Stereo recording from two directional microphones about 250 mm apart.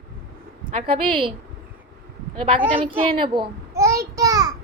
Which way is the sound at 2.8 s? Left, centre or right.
Right.